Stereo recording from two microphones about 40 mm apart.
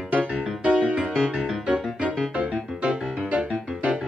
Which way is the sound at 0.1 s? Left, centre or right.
Right.